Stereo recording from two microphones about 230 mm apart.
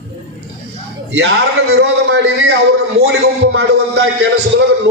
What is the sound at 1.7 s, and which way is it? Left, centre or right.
A man's voice, right.